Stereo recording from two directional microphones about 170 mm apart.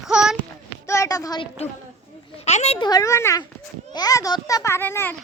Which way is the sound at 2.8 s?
25° left (ahead or behind).